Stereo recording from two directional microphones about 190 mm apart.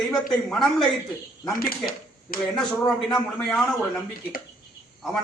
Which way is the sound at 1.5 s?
50° left (ahead or behind).